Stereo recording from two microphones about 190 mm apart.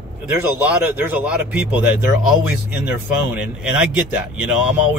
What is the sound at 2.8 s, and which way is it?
Speech, 5° right (ahead or behind).